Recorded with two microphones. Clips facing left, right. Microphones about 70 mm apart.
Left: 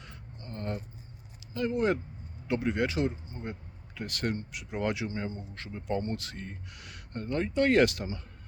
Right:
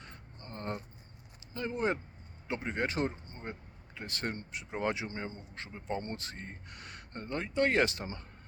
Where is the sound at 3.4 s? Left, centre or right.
Right.